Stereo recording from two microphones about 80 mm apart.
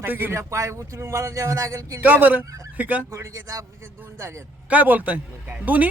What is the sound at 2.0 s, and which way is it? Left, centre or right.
A man's voice, right.